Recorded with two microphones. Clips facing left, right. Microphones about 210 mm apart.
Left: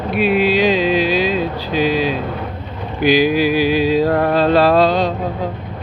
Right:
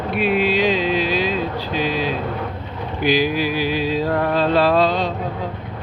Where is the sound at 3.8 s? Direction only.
85° left.